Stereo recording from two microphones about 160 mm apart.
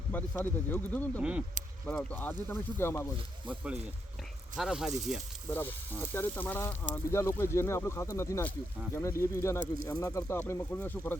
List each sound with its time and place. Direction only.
0.1 s speech: 15° left (ahead or behind)
1.2 s speech: 5° right (ahead or behind)
1.9 s speech: 5° left (ahead or behind)
3.5 s speech: 10° right (ahead or behind)
5.5 s speech: 15° left (ahead or behind)